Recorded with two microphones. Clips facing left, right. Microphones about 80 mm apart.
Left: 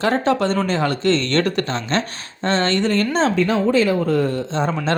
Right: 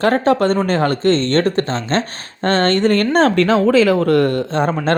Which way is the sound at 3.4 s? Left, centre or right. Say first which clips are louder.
Right 4 dB; right.